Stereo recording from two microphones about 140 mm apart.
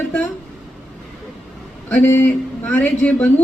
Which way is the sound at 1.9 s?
15° left (ahead or behind).